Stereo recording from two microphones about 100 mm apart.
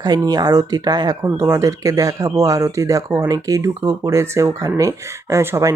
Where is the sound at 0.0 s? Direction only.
40° right (ahead or behind).